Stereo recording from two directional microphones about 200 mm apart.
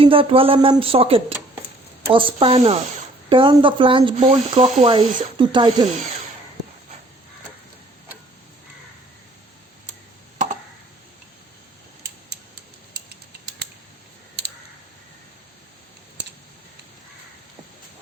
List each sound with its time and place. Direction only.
0.0 s speech: 25° right (ahead or behind)